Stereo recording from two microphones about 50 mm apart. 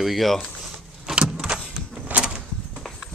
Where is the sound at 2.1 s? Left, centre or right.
Right.